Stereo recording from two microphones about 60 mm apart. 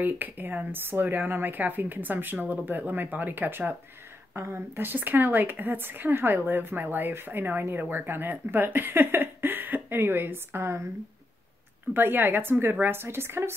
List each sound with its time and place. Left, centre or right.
0.0 s a woman's voice: right
11.9 s a woman's voice: right